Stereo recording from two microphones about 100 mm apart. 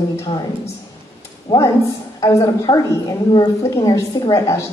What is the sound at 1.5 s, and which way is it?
Speech, 35° left (ahead or behind).